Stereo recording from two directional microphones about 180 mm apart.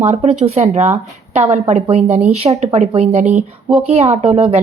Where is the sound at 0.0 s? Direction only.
35° right (ahead or behind).